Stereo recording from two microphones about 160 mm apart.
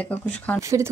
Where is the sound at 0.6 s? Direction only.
20° right (ahead or behind).